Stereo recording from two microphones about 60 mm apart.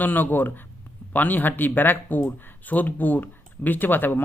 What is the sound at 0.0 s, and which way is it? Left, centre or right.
Speech, left.